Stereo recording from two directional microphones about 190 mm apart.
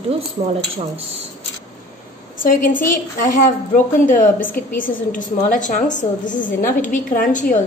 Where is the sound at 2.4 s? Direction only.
45° left (ahead or behind).